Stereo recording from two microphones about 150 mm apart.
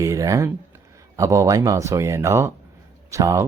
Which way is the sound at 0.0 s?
20° right (ahead or behind).